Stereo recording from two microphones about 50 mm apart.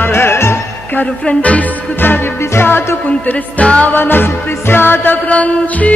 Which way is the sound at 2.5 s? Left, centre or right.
Left.